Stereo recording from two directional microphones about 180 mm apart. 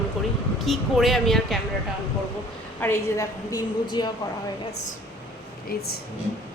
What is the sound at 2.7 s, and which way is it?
A woman's voice, 15° left (ahead or behind).